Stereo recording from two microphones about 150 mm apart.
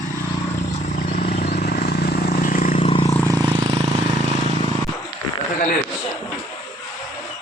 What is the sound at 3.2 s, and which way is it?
Vehicle, 30° right (ahead or behind).